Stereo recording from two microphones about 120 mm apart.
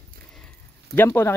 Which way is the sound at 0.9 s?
20° left (ahead or behind).